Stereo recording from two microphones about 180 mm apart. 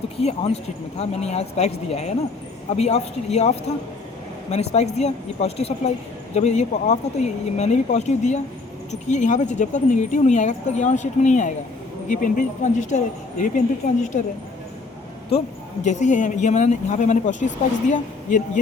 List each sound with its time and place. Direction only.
0.2 s speech: 35° left (ahead or behind)
15.8 s speech: 40° left (ahead or behind)